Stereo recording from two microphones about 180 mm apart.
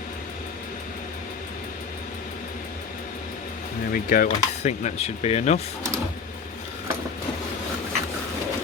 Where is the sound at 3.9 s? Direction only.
50° left (ahead or behind).